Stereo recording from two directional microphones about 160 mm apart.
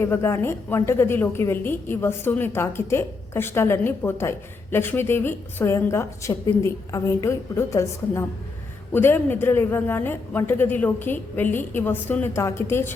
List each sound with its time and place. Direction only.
0.0 s a woman's voice: 15° left (ahead or behind)